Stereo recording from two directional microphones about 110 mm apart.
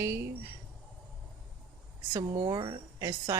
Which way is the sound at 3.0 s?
30° right (ahead or behind).